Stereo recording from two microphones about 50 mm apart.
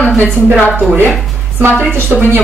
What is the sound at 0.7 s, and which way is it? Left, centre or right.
A woman's voice, right.